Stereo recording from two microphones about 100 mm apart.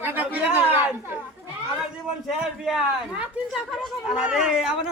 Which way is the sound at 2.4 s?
5° right (ahead or behind).